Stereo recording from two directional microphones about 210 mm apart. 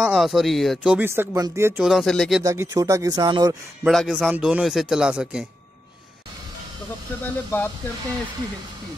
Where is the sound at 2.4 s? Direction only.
15° right (ahead or behind).